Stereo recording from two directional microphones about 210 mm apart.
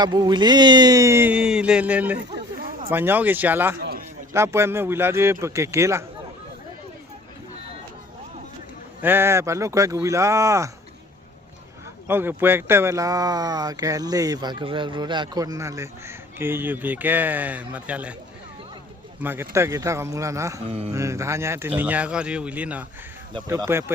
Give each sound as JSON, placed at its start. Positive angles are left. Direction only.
{"t": 0.0, "sound": "speech", "side_deg": -20}
{"t": 3.8, "sound": "a sound", "side_deg": -45}
{"t": 4.3, "sound": "speech", "side_deg": -10}
{"t": 9.0, "sound": "speech", "side_deg": -10}
{"t": 12.0, "sound": "speech", "side_deg": -10}
{"t": 19.2, "sound": "speech", "side_deg": -10}